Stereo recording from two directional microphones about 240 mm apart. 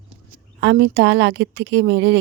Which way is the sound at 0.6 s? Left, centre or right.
Right.